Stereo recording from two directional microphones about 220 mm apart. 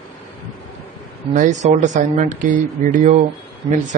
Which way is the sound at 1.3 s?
35° right (ahead or behind).